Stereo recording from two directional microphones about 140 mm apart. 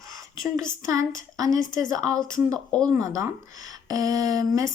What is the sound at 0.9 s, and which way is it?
Speech, 25° right (ahead or behind).